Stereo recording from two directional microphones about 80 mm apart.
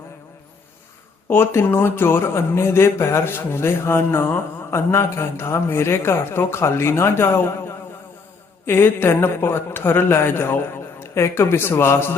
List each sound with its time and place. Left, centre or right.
1.3 s speech: left
8.6 s a man's voice: left